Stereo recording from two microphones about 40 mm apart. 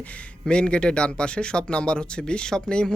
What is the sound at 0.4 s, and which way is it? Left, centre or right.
Speech, left.